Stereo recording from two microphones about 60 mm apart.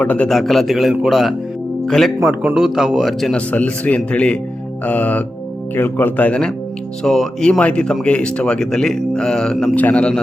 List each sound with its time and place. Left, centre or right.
0.0 s speech: left
0.3 s a man's voice: centre
2.6 s a man's voice: centre
3.3 s speech: left
5.7 s speech: left
7.0 s a man's voice: centre
7.6 s speech: centre
9.7 s speech: left